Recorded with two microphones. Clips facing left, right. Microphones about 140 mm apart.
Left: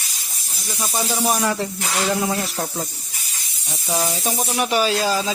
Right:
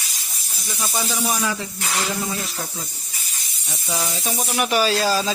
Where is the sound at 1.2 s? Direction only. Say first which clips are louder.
Left 5 dB; 55° left (ahead or behind).